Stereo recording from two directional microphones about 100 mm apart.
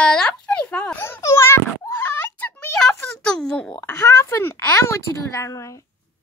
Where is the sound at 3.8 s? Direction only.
30° left (ahead or behind).